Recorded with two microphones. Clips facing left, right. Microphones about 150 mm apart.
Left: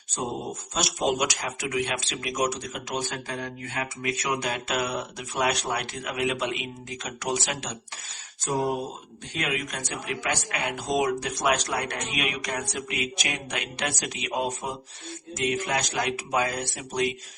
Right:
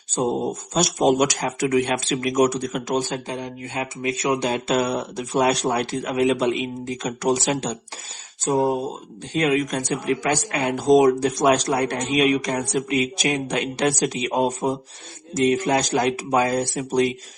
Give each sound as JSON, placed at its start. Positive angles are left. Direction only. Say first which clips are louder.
{"t": 0.7, "sound": "speech", "louder": "right 7 dB", "side_deg": -40}
{"t": 3.2, "sound": "speech", "louder": "right 4 dB", "side_deg": -20}